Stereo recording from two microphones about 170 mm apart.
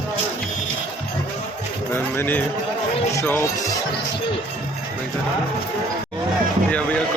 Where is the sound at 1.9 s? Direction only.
10° left (ahead or behind).